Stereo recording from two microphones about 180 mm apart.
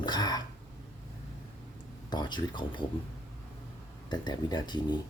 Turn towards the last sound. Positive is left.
turn(degrees=25)  # may be behind; listen again after turning